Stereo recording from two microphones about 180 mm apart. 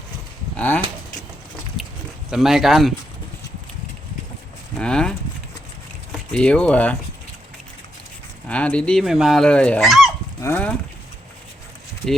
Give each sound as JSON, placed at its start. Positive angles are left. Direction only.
{"t": 0.5, "sound": "speech", "side_deg": 10}
{"t": 1.8, "sound": "a sound", "side_deg": 0}
{"t": 2.3, "sound": "speech", "side_deg": 0}
{"t": 4.8, "sound": "livestock", "side_deg": 5}
{"t": 6.1, "sound": "speech", "side_deg": 5}
{"t": 8.4, "sound": "speech", "side_deg": 5}
{"t": 10.4, "sound": "speech", "side_deg": 10}